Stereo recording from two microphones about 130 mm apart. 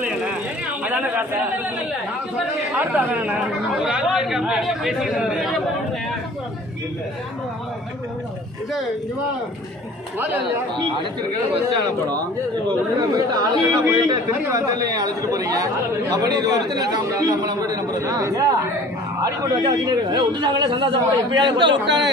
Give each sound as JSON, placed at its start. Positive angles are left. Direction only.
{"t": 0.8, "sound": "a sound", "side_deg": -10}
{"t": 2.8, "sound": "speech", "side_deg": -10}
{"t": 10.1, "sound": "a man's voice", "side_deg": -15}
{"t": 12.9, "sound": "a man's voice", "side_deg": -30}